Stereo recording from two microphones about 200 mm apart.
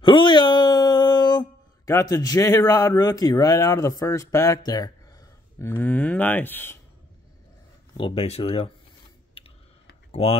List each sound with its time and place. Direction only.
0.0 s a sound: 25° left (ahead or behind)
1.9 s speech: 15° left (ahead or behind)
8.0 s speech: 30° left (ahead or behind)
9.4 s typing: 25° left (ahead or behind)